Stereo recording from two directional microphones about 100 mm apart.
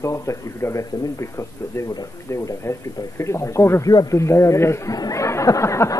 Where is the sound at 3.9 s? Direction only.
35° left (ahead or behind).